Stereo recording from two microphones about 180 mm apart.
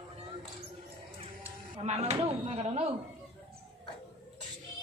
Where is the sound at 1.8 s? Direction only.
40° right (ahead or behind).